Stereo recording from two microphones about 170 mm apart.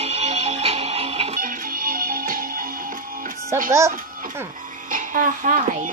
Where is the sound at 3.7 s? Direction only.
15° right (ahead or behind).